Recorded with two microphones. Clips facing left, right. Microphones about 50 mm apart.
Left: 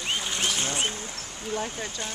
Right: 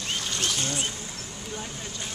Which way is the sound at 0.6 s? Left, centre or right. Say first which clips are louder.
Left 2 dB; left.